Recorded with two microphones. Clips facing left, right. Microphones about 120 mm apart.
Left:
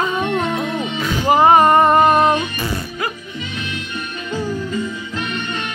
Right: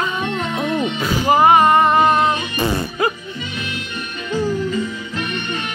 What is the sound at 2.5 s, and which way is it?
Music, 25° right (ahead or behind).